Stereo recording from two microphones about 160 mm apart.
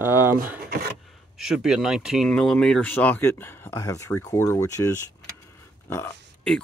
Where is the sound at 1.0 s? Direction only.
Centre (ahead or behind); by 4.9 s 20° left (ahead or behind).